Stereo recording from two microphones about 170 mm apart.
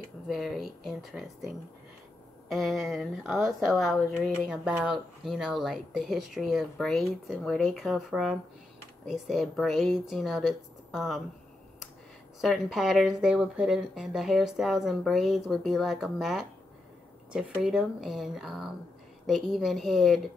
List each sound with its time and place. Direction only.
0.3 s speech: centre (ahead or behind)
2.5 s speech: centre (ahead or behind)
12.4 s speech: centre (ahead or behind)